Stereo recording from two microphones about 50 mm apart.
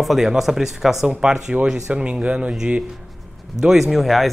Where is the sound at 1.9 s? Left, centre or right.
Right.